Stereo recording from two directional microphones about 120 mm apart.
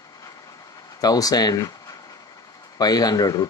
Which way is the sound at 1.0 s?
30° left (ahead or behind).